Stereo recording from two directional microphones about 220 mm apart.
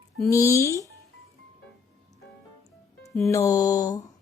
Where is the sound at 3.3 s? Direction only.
15° left (ahead or behind).